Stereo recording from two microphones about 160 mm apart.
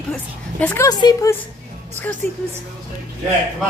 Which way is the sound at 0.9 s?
25° left (ahead or behind).